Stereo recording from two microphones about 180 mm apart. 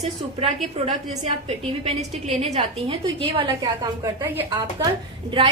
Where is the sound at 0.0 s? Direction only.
35° right (ahead or behind).